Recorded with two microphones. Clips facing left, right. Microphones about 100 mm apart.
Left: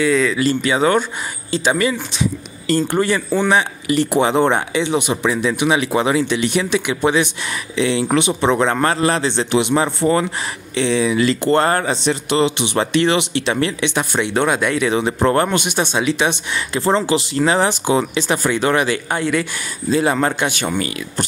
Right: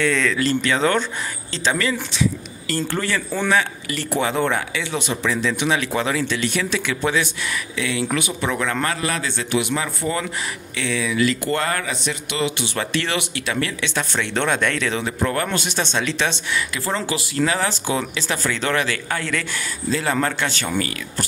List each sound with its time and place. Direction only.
0.0 s a man's voice: 5° left (ahead or behind)
15.1 s a man's voice: 30° left (ahead or behind)
15.5 s speech: 15° left (ahead or behind)
16.5 s speech: 30° left (ahead or behind)